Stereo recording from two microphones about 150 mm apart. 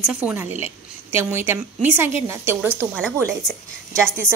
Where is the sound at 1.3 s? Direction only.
15° right (ahead or behind).